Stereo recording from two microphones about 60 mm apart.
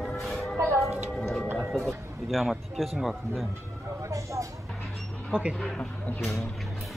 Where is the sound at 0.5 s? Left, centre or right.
Right.